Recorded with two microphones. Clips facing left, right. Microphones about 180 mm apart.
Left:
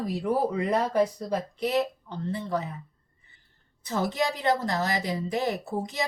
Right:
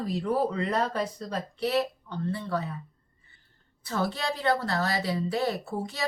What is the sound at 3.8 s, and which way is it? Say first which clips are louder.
Speech: left 3 dB; 20° left (ahead or behind).